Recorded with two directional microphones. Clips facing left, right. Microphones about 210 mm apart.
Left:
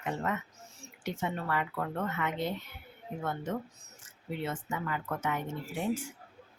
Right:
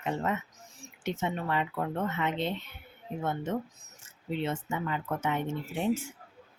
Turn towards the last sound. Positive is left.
turn(degrees=-25)  # may be behind; listen again after turning